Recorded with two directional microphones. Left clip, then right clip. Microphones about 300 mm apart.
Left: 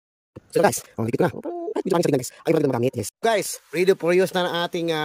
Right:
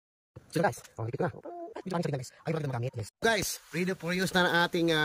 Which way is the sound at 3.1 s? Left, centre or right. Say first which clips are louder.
Left 5 dB; centre.